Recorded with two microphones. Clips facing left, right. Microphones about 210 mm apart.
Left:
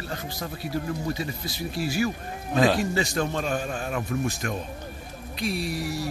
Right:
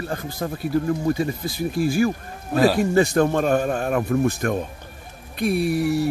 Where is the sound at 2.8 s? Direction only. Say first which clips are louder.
Right 8 dB; 55° right (ahead or behind).